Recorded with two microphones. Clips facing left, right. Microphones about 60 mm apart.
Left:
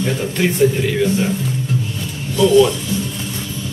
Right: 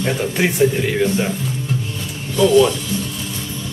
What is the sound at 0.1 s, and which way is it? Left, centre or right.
Speech, centre.